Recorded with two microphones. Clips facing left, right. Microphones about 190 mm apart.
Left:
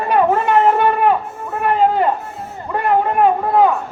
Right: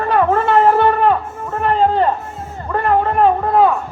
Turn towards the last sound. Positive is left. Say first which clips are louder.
# right 1 dB
turn(degrees=15)  # may be behind; listen again after turning